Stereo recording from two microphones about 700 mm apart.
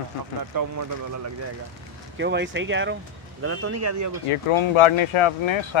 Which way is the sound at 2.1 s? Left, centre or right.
Centre.